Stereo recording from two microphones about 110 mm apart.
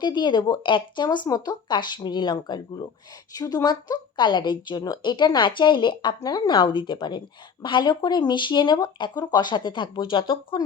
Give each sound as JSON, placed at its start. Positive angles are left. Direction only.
{"t": 0.0, "sound": "speech", "side_deg": 45}